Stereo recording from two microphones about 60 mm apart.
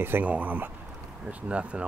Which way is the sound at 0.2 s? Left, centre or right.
Right.